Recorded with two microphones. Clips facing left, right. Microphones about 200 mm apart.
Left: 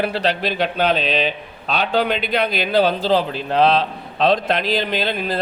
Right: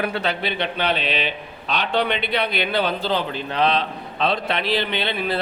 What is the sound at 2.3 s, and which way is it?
Speech, 90° left.